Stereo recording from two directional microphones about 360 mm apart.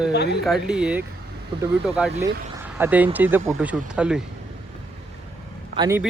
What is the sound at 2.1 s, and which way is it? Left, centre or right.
Speech, centre.